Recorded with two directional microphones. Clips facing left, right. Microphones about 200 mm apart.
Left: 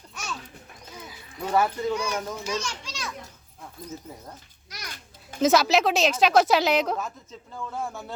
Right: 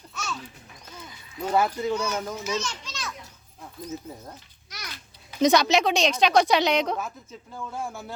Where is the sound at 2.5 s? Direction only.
10° left (ahead or behind).